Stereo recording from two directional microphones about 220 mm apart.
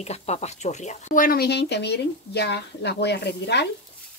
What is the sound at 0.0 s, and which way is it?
Speech, 30° left (ahead or behind).